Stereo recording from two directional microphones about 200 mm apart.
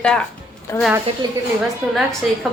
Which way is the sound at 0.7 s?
15° left (ahead or behind).